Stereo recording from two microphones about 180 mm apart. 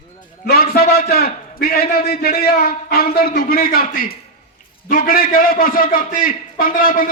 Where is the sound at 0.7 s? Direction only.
60° left (ahead or behind).